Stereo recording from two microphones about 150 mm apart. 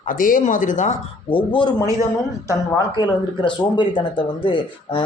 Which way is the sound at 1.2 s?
35° left (ahead or behind).